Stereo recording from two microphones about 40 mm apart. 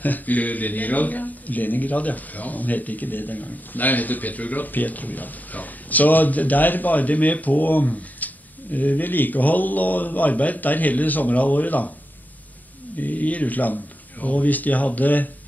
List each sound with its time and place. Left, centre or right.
0.0 s speech: left
8.2 s a sound: left
8.7 s speech: left
12.9 s speech: left